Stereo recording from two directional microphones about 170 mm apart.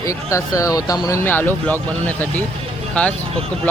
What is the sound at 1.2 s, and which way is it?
Speech, 10° left (ahead or behind).